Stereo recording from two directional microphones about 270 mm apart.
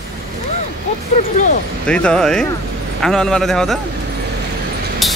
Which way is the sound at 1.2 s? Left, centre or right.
Left.